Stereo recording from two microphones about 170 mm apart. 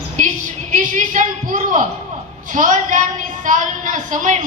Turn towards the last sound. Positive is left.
turn(degrees=-45)  # may be behind; listen again after turning